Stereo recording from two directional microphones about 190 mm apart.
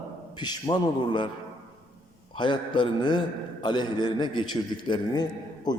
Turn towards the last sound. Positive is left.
turn(degrees=20)  # may be behind; listen again after turning